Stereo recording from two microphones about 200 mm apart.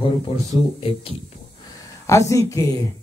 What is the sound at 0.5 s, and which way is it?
Speech, 25° left (ahead or behind).